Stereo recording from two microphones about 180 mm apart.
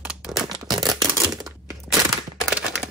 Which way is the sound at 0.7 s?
20° right (ahead or behind).